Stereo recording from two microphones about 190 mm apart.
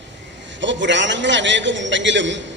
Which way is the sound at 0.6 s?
70° right (ahead or behind).